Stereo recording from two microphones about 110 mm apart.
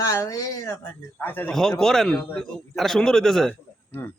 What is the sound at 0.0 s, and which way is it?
Speech, 30° left (ahead or behind).